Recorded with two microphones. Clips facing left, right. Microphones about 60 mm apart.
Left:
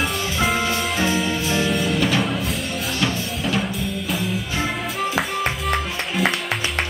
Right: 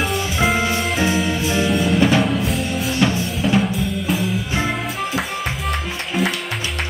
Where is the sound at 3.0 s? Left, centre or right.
Centre.